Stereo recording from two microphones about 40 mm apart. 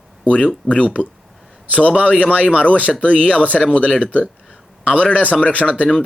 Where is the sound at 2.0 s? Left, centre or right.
Left.